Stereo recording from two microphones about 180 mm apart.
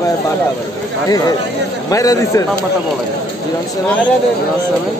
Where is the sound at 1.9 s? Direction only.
20° left (ahead or behind).